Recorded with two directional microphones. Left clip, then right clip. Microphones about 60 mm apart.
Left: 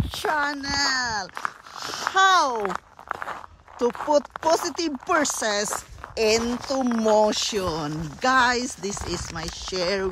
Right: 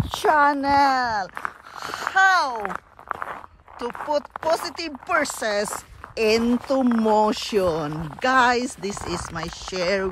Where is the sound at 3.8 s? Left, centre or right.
Left.